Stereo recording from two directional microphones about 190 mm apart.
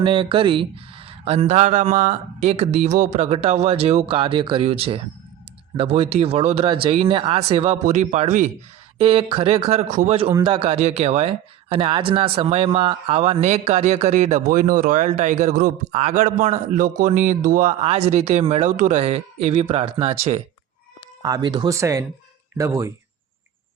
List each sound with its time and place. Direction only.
0.0 s speech: 25° right (ahead or behind)
9.0 s speech: 30° right (ahead or behind)
10.2 s speech: 20° right (ahead or behind)
14.4 s a man's voice: 50° right (ahead or behind); by 20.4 s 30° right (ahead or behind)
21.2 s speech: 20° right (ahead or behind)